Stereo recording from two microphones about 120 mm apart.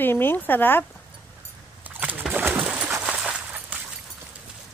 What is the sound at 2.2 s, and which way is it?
Bird, 15° right (ahead or behind).